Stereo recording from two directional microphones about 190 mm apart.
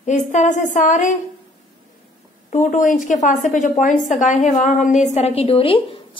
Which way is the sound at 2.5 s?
40° left (ahead or behind).